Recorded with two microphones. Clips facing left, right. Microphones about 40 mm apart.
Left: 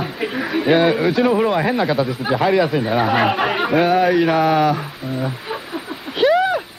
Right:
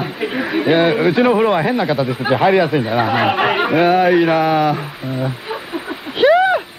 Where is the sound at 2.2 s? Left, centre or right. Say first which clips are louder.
Right 4 dB; centre.